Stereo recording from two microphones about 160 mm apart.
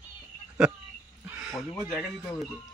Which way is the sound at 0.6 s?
5° right (ahead or behind).